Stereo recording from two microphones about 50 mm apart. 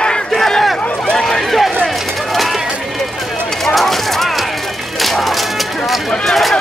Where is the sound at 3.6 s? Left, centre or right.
Centre.